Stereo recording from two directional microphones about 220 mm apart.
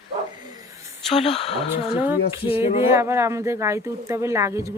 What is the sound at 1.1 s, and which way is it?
Speech, 30° left (ahead or behind).